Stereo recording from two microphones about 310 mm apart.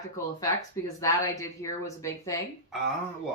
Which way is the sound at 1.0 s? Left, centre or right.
Centre.